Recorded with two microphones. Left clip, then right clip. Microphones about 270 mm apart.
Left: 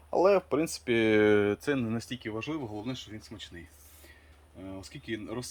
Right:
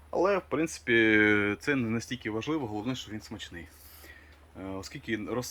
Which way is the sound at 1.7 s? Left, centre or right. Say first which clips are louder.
Right 2 dB; centre.